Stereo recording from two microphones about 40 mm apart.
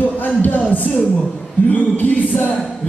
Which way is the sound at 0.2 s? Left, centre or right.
Left.